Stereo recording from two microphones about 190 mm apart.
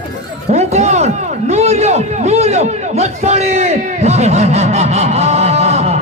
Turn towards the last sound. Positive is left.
turn(degrees=-35)  # may be behind; listen again after turning